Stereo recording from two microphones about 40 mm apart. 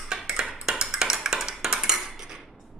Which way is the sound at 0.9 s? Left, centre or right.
Centre.